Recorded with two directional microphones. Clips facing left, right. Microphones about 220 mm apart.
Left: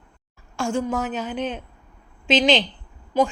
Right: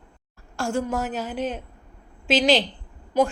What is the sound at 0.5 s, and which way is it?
A woman's voice, centre (ahead or behind).